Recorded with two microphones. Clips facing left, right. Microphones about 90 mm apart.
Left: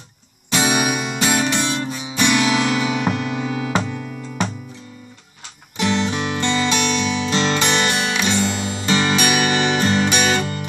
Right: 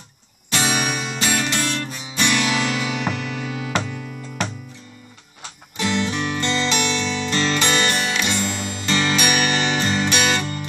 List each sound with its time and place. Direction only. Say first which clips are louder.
0.5 s music: left 3 dB; 10° left (ahead or behind)
5.8 s music: left 2 dB; 20° left (ahead or behind)
8.3 s music: left 4 dB; 30° left (ahead or behind)
8.8 s music: left 2 dB; 20° left (ahead or behind)